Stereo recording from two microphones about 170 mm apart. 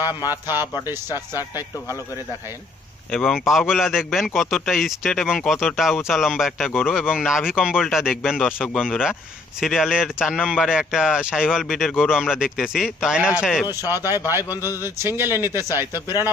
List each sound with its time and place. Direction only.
0.0 s a man's voice: 20° left (ahead or behind)
3.1 s speech: centre (ahead or behind)
13.8 s a man's voice: 20° left (ahead or behind)
14.8 s speech: 15° right (ahead or behind)